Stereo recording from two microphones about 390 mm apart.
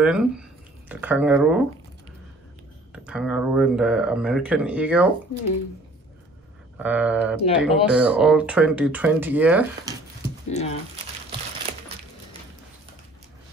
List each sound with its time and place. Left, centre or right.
0.0 s speech: centre
2.9 s speech: centre
6.8 s speech: centre
10.5 s speech: centre